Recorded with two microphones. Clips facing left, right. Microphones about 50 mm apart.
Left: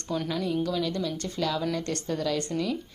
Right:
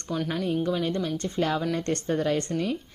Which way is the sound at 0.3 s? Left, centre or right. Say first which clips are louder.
Right 2 dB; right.